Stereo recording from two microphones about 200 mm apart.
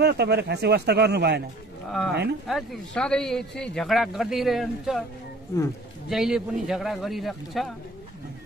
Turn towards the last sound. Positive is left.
turn(degrees=0)  # may be behind; listen again after turning